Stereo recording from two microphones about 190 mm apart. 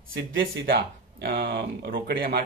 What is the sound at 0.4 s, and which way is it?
Speech, 55° right (ahead or behind).